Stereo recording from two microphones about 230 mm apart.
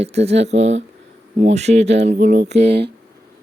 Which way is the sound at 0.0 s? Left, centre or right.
Right.